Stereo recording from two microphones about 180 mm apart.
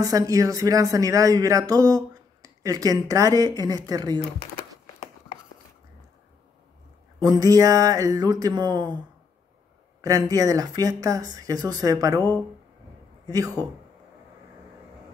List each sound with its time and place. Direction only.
0.0 s speech: 20° right (ahead or behind)
7.2 s speech: 20° right (ahead or behind)
10.0 s speech: 20° right (ahead or behind)
12.2 s speech: 10° left (ahead or behind)